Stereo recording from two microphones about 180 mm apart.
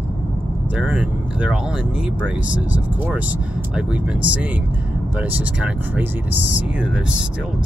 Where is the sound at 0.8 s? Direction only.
5° right (ahead or behind).